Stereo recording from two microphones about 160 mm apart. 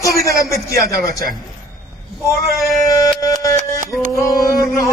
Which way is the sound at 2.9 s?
20° left (ahead or behind).